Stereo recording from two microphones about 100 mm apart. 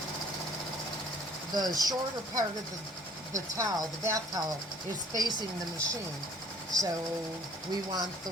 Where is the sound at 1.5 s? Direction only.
40° right (ahead or behind).